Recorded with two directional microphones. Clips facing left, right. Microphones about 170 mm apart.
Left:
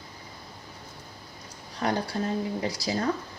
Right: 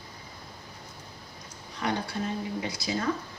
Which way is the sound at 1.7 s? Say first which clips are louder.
Left 3 dB; 35° left (ahead or behind).